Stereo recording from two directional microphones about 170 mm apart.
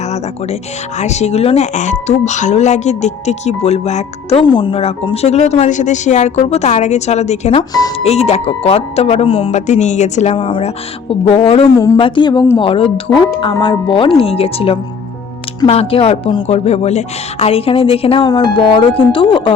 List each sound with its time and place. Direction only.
0.9 s speech: 40° left (ahead or behind)
4.4 s speech: 25° left (ahead or behind)
13.1 s speech: 15° left (ahead or behind)
13.4 s speech: 30° left (ahead or behind)